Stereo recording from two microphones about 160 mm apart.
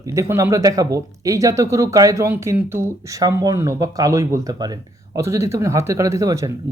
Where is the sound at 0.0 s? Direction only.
20° right (ahead or behind).